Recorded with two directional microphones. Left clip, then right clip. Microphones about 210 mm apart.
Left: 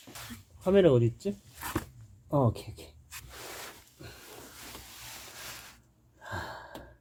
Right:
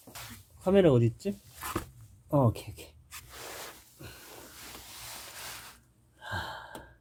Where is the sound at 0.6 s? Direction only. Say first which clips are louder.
Left 1 dB; 30° right (ahead or behind).